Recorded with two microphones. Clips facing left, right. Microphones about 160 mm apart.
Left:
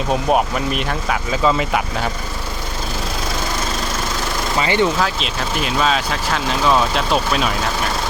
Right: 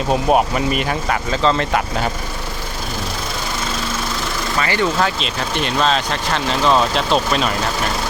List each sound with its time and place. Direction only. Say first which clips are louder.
0.1 s speech: right 2 dB; centre (ahead or behind)
4.5 s speech: left 2 dB; 20° left (ahead or behind)
4.9 s speech: right 1 dB; centre (ahead or behind)